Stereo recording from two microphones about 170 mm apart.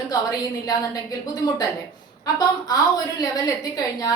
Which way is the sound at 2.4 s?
25° left (ahead or behind).